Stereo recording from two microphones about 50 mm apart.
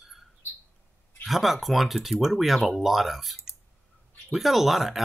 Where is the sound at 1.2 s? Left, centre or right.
Centre.